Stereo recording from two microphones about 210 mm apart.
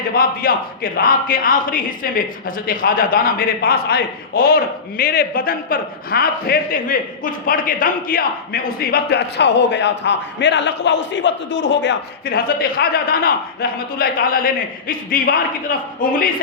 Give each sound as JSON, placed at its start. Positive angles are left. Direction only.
{"t": 0.1, "sound": "a man's voice", "side_deg": 45}